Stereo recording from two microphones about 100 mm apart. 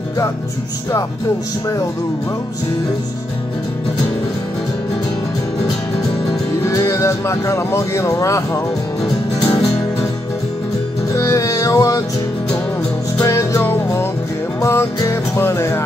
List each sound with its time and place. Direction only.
6.2 s speech: 35° left (ahead or behind)
11.1 s music: 30° left (ahead or behind)
13.2 s music: 30° left (ahead or behind)